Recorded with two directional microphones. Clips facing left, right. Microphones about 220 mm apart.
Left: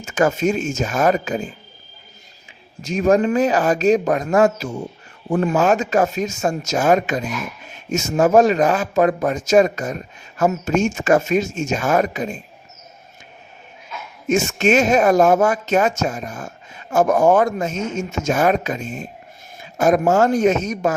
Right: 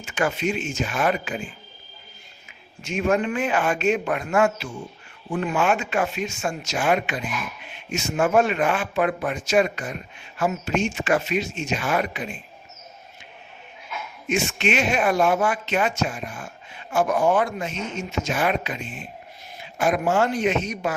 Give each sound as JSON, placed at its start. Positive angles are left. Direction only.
{"t": 0.0, "sound": "speech", "side_deg": 40}
{"t": 14.3, "sound": "speech", "side_deg": 45}